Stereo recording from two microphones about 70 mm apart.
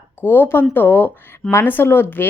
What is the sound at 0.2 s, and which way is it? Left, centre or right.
A woman's voice, left.